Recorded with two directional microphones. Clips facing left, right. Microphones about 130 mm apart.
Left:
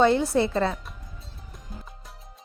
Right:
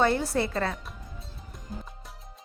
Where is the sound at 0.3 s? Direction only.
20° left (ahead or behind).